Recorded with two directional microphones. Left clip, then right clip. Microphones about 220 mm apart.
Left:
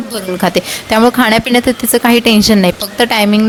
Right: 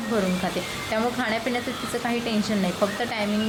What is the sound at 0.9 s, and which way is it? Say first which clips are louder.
A woman's voice: left 16 dB; 50° left (ahead or behind).